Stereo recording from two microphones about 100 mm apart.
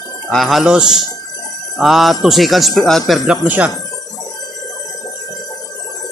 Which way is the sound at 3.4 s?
15° right (ahead or behind).